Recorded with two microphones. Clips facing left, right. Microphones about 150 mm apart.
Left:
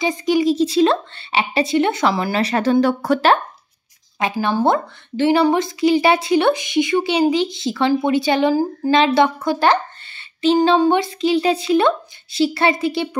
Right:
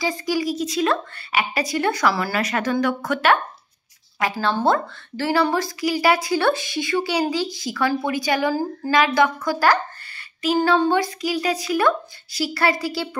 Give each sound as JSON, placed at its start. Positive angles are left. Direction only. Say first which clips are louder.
{"t": 0.0, "sound": "speech", "louder": "left 6 dB", "side_deg": 20}
{"t": 4.2, "sound": "a woman's voice", "louder": "left 3 dB", "side_deg": 15}